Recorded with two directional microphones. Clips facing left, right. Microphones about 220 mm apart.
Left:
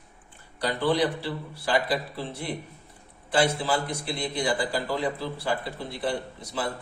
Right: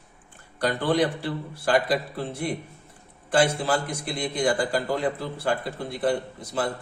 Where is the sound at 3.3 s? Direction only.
50° right (ahead or behind).